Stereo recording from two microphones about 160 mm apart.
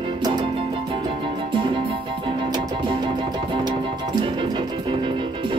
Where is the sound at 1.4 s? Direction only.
30° right (ahead or behind).